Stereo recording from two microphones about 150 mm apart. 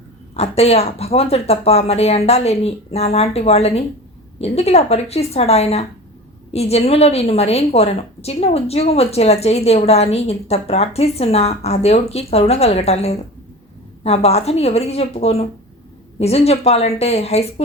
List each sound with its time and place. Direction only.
0.3 s a woman's voice: 45° left (ahead or behind)